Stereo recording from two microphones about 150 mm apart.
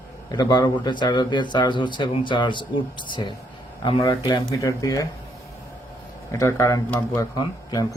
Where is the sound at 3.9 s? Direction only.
35° left (ahead or behind).